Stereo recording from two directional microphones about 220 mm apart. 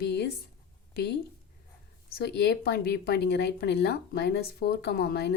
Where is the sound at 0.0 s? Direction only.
50° left (ahead or behind).